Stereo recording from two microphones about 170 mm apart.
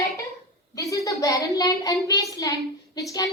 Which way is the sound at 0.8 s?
20° left (ahead or behind).